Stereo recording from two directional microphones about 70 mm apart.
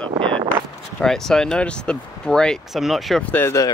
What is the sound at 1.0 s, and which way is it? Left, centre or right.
Speech, centre.